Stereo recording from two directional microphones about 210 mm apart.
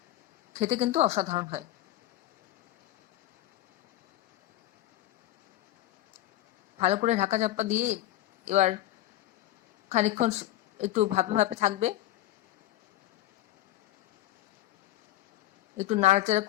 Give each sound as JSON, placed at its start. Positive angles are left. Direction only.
{"t": 0.6, "sound": "a woman's voice", "side_deg": -30}
{"t": 6.7, "sound": "a woman's voice", "side_deg": -30}
{"t": 9.9, "sound": "a woman's voice", "side_deg": -35}
{"t": 15.8, "sound": "a woman's voice", "side_deg": -30}